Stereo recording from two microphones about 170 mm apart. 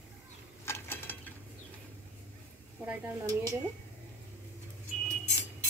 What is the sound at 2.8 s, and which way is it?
Speech, 15° right (ahead or behind).